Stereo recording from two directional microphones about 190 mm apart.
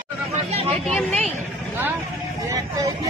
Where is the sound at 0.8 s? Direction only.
5° left (ahead or behind).